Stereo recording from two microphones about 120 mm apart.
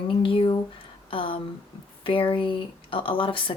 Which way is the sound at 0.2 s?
45° left (ahead or behind).